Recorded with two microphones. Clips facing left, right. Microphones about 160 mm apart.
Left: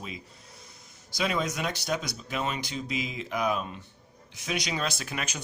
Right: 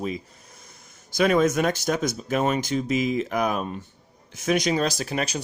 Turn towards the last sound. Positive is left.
turn(degrees=-35)  # may be behind; listen again after turning